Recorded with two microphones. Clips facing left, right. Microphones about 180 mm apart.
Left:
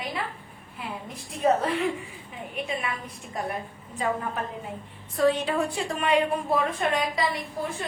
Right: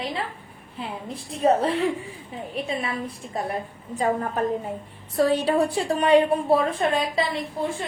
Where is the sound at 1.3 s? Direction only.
30° right (ahead or behind).